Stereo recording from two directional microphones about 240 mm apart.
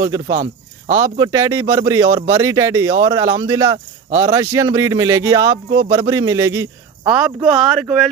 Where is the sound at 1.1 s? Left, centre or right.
Centre.